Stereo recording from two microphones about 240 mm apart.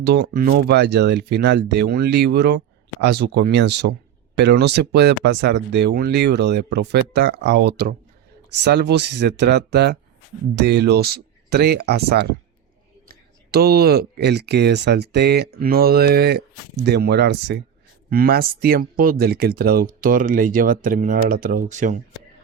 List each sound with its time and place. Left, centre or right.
0.0 s speech: right